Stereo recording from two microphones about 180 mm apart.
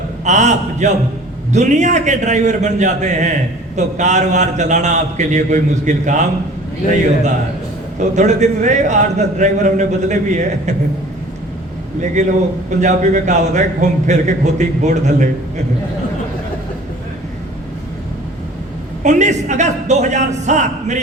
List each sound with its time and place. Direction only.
0.3 s a man's voice: 40° right (ahead or behind)
7.9 s a man's voice: 40° right (ahead or behind)
12.2 s a man's voice: 40° right (ahead or behind)
19.0 s a man's voice: 40° right (ahead or behind)